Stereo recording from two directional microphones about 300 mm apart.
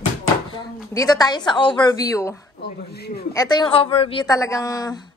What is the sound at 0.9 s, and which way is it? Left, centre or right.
A woman's voice, centre.